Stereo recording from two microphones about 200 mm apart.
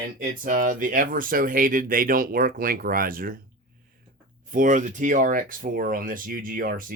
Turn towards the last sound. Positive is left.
turn(degrees=-45)  # may be behind; listen again after turning